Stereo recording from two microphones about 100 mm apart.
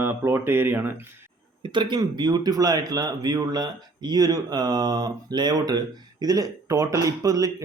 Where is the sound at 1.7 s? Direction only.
50° right (ahead or behind).